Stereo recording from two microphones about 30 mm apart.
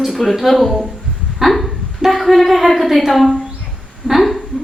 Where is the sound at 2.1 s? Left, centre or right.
Centre.